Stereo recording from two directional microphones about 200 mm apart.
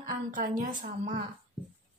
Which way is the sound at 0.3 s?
45° right (ahead or behind).